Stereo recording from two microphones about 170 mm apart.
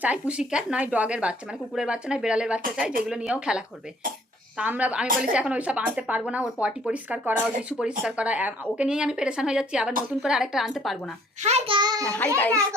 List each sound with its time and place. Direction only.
0.0 s speech: 5° right (ahead or behind)
11.3 s a child's voice: 40° right (ahead or behind); by 12.0 s 25° right (ahead or behind)
12.0 s a child's voice: 10° left (ahead or behind)